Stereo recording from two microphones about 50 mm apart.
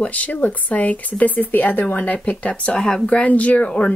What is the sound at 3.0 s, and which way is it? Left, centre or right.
Speech, left.